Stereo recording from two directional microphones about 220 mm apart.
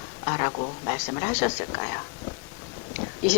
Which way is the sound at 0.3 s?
20° left (ahead or behind).